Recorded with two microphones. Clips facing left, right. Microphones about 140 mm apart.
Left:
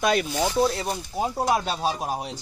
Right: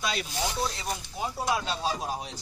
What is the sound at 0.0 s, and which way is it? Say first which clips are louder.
Speech: left 10 dB; 55° left (ahead or behind).